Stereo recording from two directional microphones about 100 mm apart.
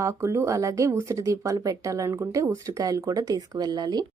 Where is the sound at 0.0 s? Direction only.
30° right (ahead or behind).